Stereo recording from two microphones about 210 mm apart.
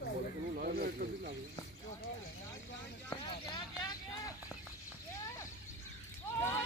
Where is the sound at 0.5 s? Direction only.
45° right (ahead or behind).